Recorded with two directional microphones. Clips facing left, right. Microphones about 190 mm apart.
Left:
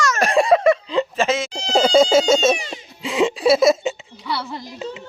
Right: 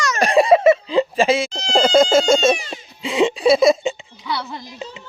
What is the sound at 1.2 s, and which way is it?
Speech, 10° right (ahead or behind).